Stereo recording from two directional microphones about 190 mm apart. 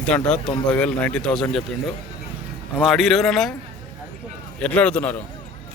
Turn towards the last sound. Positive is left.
turn(degrees=5)  # may be behind; listen again after turning